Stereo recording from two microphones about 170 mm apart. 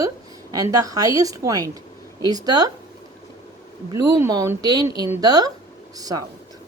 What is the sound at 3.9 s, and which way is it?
A woman's voice, 20° right (ahead or behind).